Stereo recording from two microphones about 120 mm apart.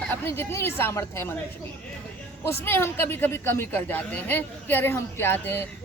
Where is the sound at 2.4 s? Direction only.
20° left (ahead or behind).